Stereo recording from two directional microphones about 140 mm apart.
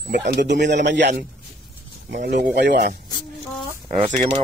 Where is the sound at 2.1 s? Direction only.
80° right.